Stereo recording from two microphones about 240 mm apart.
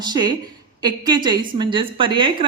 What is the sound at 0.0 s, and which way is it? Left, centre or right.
A woman's voice, centre.